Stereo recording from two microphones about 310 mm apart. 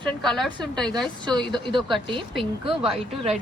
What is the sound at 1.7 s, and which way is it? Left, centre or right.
A woman's voice, centre.